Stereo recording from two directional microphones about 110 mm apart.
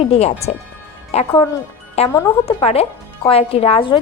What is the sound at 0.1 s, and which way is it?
A woman's voice, 75° left (ahead or behind).